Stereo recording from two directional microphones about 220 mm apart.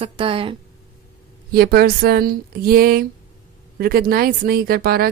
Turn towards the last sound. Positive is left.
turn(degrees=-45)  # may be behind; listen again after turning